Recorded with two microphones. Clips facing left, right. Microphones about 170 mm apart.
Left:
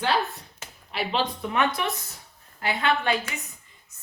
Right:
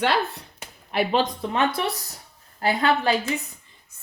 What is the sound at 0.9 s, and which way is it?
Speech, 50° right (ahead or behind).